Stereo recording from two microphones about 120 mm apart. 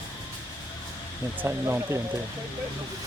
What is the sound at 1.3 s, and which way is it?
Speech, 20° right (ahead or behind).